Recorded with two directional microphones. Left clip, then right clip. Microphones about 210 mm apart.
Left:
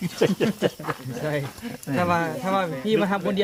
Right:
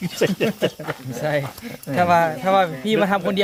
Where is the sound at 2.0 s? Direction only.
65° right (ahead or behind).